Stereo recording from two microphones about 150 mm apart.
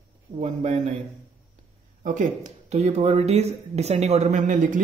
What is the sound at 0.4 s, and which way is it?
Speech, 50° right (ahead or behind).